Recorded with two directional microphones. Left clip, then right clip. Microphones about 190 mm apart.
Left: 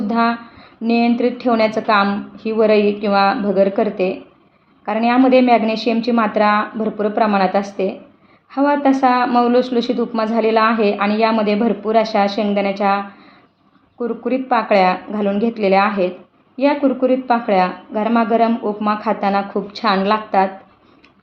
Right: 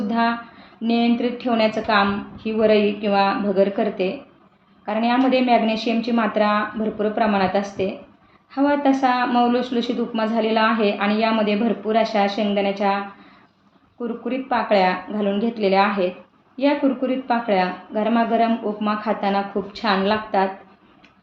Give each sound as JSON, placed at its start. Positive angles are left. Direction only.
{"t": 0.1, "sound": "a woman's voice", "side_deg": 30}
{"t": 14.0, "sound": "a woman's voice", "side_deg": 35}